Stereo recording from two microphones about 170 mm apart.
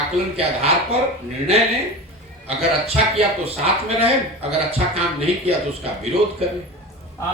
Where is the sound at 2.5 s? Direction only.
35° right (ahead or behind).